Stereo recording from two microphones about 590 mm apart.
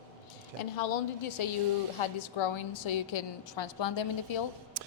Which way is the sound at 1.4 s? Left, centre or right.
Left.